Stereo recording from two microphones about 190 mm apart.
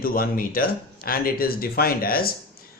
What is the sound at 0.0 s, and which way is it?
Speech, 50° left (ahead or behind).